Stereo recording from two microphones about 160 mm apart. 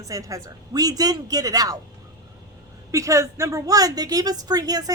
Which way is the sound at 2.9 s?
20° right (ahead or behind).